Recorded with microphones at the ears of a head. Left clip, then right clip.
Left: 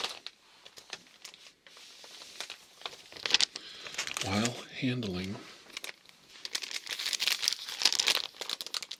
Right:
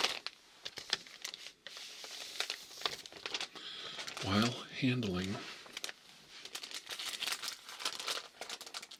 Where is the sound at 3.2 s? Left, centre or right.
Left.